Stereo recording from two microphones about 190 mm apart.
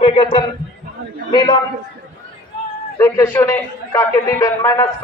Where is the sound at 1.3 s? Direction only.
20° left (ahead or behind).